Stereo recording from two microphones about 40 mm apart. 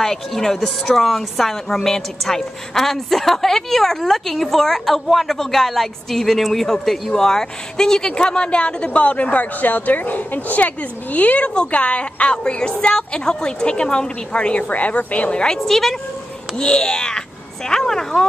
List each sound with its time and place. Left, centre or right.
0.0 s a woman's voice: centre; by 14.6 s left
14.6 s a woman's voice: left
15.3 s a child's voice: centre
15.6 s a woman's voice: centre
16.5 s a child's voice: centre